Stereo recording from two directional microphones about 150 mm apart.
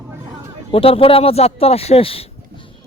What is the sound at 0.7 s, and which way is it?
Speech, 40° left (ahead or behind).